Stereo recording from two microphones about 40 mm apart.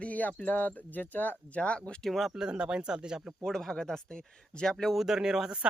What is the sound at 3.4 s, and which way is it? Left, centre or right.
Speech, centre.